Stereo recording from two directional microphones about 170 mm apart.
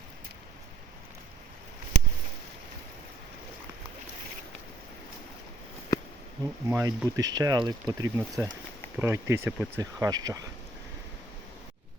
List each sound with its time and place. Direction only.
5.9 s a sound: 20° left (ahead or behind)
6.7 s speech: 10° right (ahead or behind)
10.0 s speech: 20° right (ahead or behind)